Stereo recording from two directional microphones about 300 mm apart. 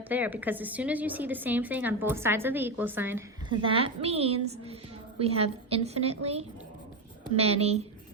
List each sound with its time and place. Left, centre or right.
0.1 s a woman's voice: centre